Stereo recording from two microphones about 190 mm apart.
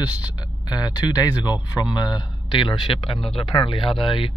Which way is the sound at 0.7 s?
20° left (ahead or behind).